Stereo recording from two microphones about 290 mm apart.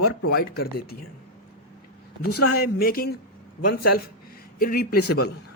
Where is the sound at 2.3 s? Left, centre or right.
Left.